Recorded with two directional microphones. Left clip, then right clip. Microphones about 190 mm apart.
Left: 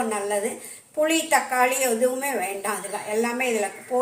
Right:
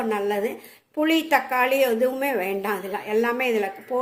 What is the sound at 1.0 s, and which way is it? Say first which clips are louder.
A woman's voice: even; 55° right (ahead or behind).